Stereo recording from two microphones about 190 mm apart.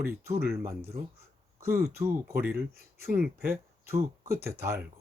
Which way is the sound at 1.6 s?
15° right (ahead or behind).